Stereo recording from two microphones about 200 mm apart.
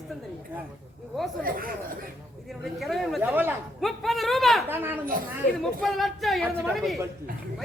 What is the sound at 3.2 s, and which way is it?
Speech, 10° right (ahead or behind).